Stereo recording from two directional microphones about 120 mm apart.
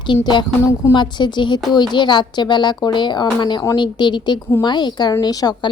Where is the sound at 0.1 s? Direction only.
40° left (ahead or behind).